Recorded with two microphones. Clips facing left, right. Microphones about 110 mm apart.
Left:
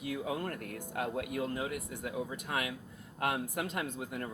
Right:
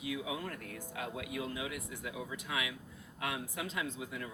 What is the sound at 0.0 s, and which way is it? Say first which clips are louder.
Speech: left 3 dB; 50° left (ahead or behind).